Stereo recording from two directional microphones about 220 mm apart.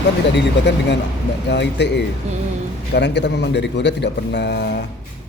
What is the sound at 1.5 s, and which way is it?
A man's voice, 50° left (ahead or behind).